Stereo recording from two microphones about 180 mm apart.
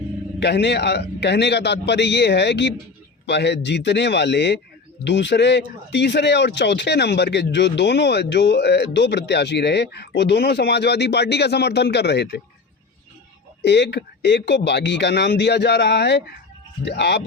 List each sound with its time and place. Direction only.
0.3 s speech: 70° left (ahead or behind)
13.6 s speech: 70° left (ahead or behind)